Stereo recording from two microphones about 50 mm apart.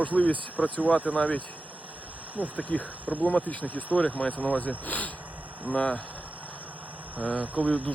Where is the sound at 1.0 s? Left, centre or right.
Left.